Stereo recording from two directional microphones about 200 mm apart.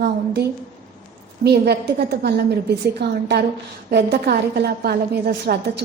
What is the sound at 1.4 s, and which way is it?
A woman's voice, 55° right (ahead or behind).